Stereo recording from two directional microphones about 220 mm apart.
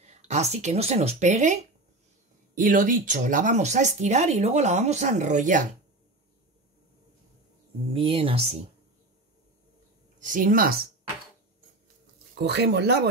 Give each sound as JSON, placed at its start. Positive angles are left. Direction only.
{"t": 0.0, "sound": "speech", "side_deg": -30}
{"t": 7.9, "sound": "speech", "side_deg": -25}
{"t": 10.2, "sound": "speech", "side_deg": -40}
{"t": 12.4, "sound": "speech", "side_deg": -50}